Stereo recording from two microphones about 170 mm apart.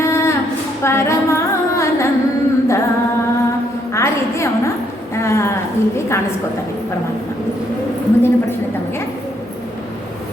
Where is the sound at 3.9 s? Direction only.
15° left (ahead or behind).